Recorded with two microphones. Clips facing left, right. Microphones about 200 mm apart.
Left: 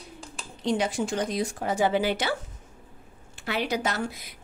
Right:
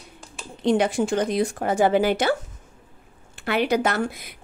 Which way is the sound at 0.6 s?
60° right (ahead or behind).